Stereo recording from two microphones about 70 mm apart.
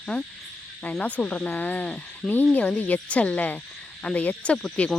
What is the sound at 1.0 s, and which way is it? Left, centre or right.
Speech, left.